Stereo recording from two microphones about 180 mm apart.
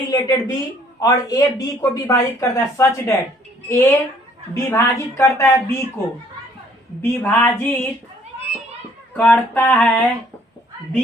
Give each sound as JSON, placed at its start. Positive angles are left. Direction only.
{"t": 0.1, "sound": "speech", "side_deg": 20}
{"t": 7.0, "sound": "speech", "side_deg": 15}
{"t": 9.1, "sound": "speech", "side_deg": 10}